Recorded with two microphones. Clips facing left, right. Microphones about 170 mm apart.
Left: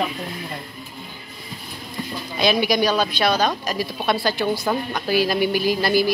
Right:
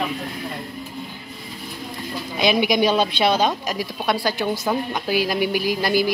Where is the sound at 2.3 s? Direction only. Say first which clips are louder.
Right 1 dB; 20° right (ahead or behind).